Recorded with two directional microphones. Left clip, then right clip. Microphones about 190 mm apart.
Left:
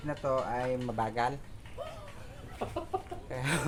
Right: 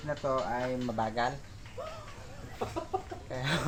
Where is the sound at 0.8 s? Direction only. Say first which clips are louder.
Even; 20° left (ahead or behind).